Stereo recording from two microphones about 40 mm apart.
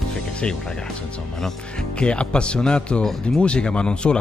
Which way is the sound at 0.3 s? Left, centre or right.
Left.